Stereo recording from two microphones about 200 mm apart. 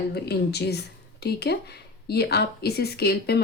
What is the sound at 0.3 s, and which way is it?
Speech, 55° left (ahead or behind).